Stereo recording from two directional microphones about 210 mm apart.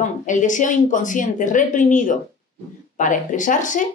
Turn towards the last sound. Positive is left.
turn(degrees=35)  # may be behind; listen again after turning